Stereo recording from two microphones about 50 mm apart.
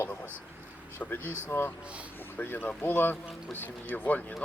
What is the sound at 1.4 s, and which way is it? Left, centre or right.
A man's voice, left.